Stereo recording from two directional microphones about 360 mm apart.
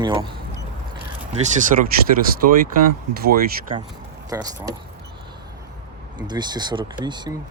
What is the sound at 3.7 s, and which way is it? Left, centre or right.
Speech, centre.